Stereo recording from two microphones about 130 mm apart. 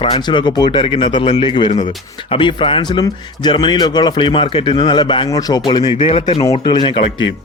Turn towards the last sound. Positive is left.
turn(degrees=35)  # may be behind; listen again after turning